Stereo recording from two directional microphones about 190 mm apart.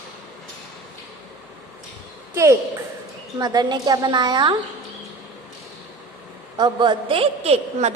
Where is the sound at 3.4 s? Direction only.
20° right (ahead or behind).